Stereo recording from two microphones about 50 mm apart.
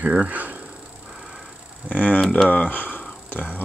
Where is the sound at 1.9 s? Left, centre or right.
Left.